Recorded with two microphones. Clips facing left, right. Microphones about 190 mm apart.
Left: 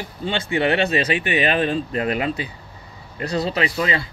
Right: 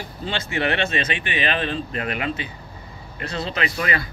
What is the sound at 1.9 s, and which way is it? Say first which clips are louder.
Speech: left 4 dB; 30° left (ahead or behind).